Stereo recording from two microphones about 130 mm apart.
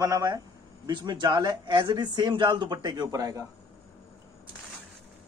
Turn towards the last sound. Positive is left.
turn(degrees=-25)  # may be behind; listen again after turning